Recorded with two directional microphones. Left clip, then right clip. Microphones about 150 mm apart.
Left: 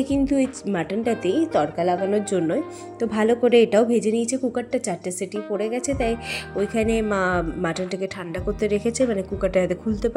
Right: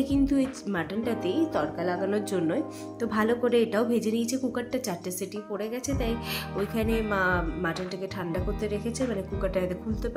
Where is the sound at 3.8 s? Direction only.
25° left (ahead or behind); by 10.1 s 45° left (ahead or behind).